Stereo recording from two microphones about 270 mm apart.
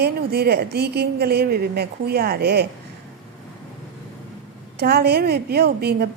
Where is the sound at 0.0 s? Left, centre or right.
Right.